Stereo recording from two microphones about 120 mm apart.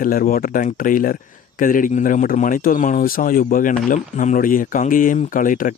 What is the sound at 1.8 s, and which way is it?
Speech, 90° left.